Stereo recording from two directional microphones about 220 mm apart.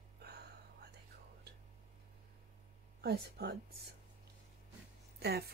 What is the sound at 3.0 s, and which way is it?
Speech, 45° right (ahead or behind).